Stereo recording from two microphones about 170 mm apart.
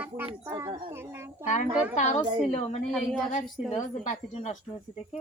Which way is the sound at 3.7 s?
45° left (ahead or behind).